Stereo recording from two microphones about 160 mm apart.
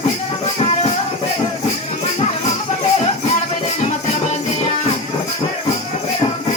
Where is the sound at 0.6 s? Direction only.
40° left (ahead or behind).